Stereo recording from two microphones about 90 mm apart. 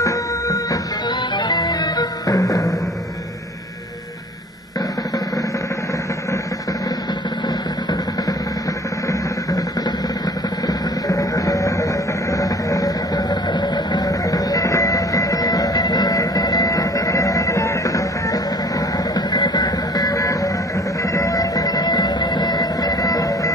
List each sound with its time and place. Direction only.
0.0 s music: 40° left (ahead or behind)
1.3 s music: 50° left (ahead or behind)
9.5 s vehicle: 40° left (ahead or behind)
10.7 s music: 40° left (ahead or behind)